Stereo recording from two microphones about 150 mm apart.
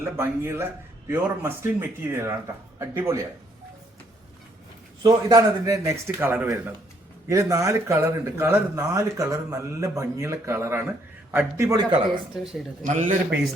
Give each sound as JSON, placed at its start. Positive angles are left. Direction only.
{"t": 0.0, "sound": "speech", "side_deg": -15}
{"t": 5.0, "sound": "speech", "side_deg": -25}
{"t": 12.8, "sound": "a man's voice", "side_deg": -55}